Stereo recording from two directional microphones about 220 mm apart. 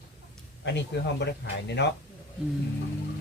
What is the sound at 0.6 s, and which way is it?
Speech, 50° left (ahead or behind).